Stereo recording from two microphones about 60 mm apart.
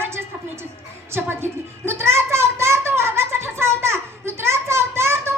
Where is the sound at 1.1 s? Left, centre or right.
Right.